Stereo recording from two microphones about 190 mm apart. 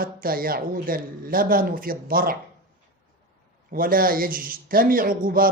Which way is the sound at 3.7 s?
50° right (ahead or behind).